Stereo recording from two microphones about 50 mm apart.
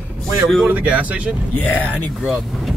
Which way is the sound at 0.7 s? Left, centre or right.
Right.